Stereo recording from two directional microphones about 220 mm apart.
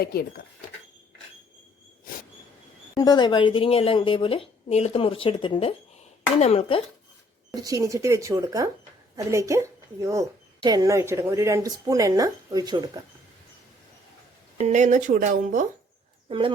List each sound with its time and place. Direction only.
0.0 s speech: 45° left (ahead or behind)
2.9 s a woman's voice: 20° left (ahead or behind)
7.5 s a woman's voice: 15° right (ahead or behind)
14.6 s speech: 35° right (ahead or behind)